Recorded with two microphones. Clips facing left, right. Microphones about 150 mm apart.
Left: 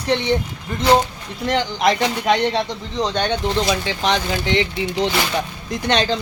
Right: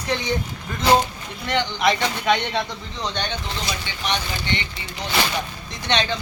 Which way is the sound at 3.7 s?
90° left.